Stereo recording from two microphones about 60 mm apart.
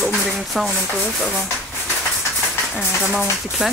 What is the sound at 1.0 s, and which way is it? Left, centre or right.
Speech, centre.